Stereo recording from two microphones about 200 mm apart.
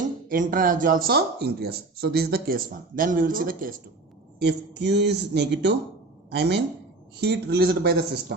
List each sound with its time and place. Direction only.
0.3 s speech: 45° right (ahead or behind)
4.4 s a man's voice: 60° right (ahead or behind)